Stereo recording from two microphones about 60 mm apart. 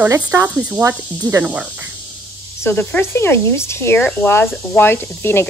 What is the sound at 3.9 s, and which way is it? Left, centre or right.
Speech, left.